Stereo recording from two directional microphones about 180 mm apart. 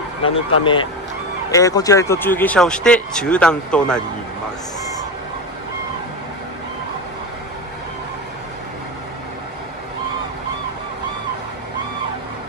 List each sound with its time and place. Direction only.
0.2 s speech: 25° left (ahead or behind); by 4.0 s 5° left (ahead or behind)